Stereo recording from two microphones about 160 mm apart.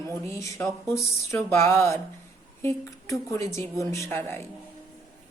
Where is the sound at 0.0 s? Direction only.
20° left (ahead or behind).